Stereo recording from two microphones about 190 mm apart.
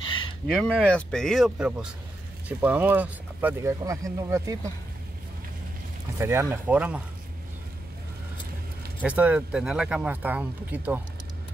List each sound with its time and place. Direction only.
0.6 s speech: 5° left (ahead or behind); by 4.6 s 15° right (ahead or behind)
6.1 s speech: 15° right (ahead or behind)
9.0 s speech: 5° right (ahead or behind)